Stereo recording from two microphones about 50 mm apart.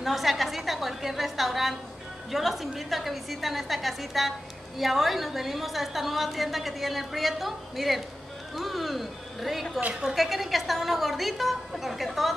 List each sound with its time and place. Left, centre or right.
0.0 s a woman's voice: centre
9.8 s a woman's voice: right
10.1 s a woman's voice: centre